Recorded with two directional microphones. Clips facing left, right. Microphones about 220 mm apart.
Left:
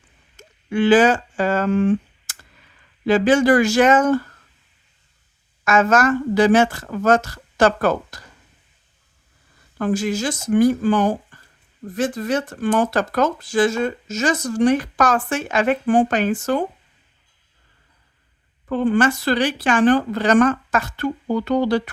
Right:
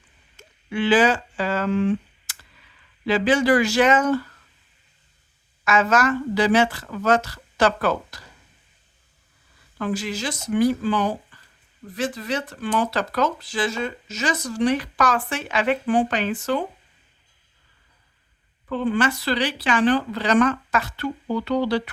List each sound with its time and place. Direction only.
0.3 s a sound: 45° left (ahead or behind)
3.1 s speech: 45° left (ahead or behind)
5.6 s speech: 45° left (ahead or behind)
9.7 s speech: 45° left (ahead or behind)
18.7 s speech: 45° left (ahead or behind)